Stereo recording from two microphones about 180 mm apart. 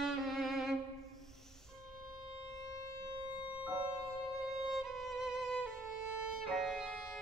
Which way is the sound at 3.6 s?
5° right (ahead or behind).